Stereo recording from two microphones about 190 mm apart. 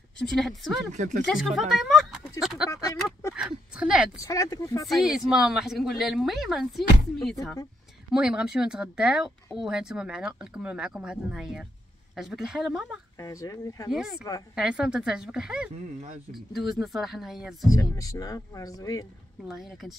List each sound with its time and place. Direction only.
0.2 s speech: centre (ahead or behind)
0.9 s speech: 40° right (ahead or behind)
1.2 s speech: centre (ahead or behind)
2.7 s speech: 15° left (ahead or behind)
3.3 s speech: 5° right (ahead or behind)
4.2 s speech: 20° left (ahead or behind)
4.8 s speech: centre (ahead or behind)
13.2 s speech: 15° left (ahead or behind)
13.8 s speech: centre (ahead or behind)
17.6 s speech: 15° left (ahead or behind)
19.4 s speech: centre (ahead or behind)